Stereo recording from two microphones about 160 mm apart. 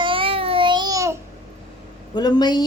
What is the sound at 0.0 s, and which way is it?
Babbling, 35° right (ahead or behind).